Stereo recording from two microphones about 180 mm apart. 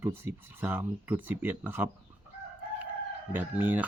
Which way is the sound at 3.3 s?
10° right (ahead or behind).